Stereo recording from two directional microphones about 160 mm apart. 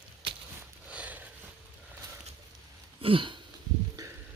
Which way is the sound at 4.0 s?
20° right (ahead or behind).